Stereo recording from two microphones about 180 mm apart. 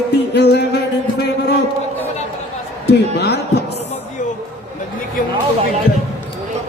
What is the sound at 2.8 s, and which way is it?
Speech, 70° left (ahead or behind).